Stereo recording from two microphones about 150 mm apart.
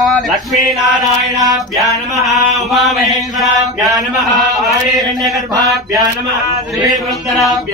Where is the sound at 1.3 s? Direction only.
25° right (ahead or behind).